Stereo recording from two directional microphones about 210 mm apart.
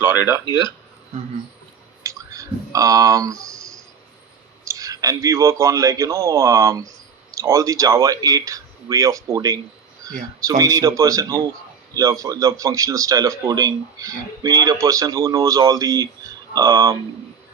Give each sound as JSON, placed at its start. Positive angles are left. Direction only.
{"t": 2.0, "sound": "clicking", "side_deg": -15}
{"t": 4.6, "sound": "speech", "side_deg": -15}